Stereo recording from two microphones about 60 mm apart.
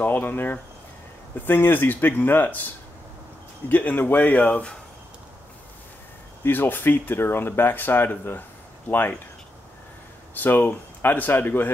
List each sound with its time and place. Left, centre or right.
0.0 s speech: left
6.4 s speech: left
10.4 s speech: left